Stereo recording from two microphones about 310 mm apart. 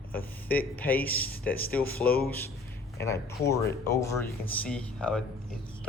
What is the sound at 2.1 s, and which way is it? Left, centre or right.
Speech, left.